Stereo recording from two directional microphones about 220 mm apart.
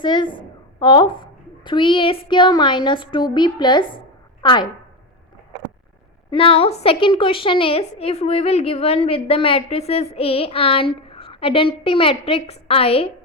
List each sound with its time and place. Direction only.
0.0 s a woman's voice: 20° left (ahead or behind)
6.3 s a woman's voice: 25° left (ahead or behind)